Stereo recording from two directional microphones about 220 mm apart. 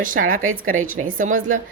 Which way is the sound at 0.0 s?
40° right (ahead or behind).